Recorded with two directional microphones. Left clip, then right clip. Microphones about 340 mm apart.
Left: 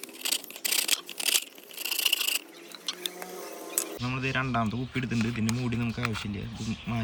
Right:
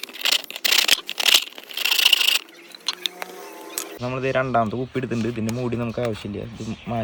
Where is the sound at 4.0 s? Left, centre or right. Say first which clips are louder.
Right 9 dB; centre.